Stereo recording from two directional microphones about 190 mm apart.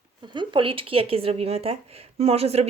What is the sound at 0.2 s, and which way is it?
Speech, 25° right (ahead or behind).